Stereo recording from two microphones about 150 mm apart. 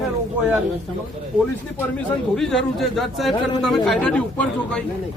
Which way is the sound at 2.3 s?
5° left (ahead or behind).